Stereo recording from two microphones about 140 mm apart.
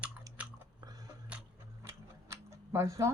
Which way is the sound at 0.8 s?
30° right (ahead or behind).